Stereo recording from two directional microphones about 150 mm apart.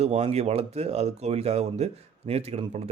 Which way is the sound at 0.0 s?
45° right (ahead or behind).